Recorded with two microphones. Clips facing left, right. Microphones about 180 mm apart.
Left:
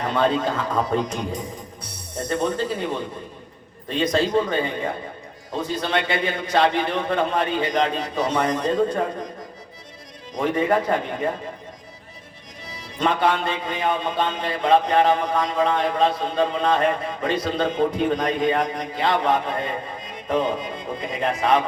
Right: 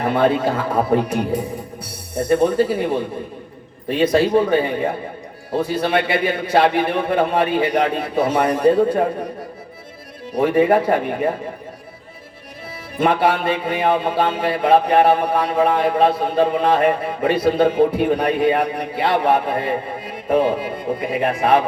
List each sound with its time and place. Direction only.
0.0 s speech: 10° right (ahead or behind)
10.3 s speech: 10° right (ahead or behind)
13.0 s speech: 10° right (ahead or behind)